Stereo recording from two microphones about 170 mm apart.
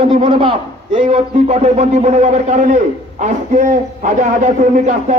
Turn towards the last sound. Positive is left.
turn(degrees=-45)  # may be behind; listen again after turning